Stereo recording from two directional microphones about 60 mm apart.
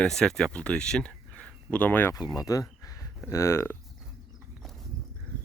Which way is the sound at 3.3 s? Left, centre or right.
Left.